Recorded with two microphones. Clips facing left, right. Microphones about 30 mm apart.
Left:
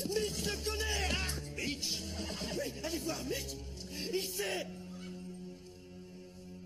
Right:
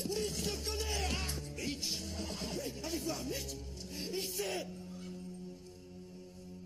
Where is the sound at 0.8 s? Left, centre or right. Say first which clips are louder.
Left 3 dB; left.